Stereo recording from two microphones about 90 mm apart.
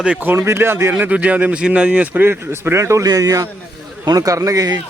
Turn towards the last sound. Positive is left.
turn(degrees=-40)  # may be behind; listen again after turning